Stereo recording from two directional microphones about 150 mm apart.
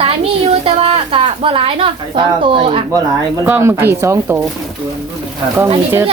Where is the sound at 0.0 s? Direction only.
40° right (ahead or behind).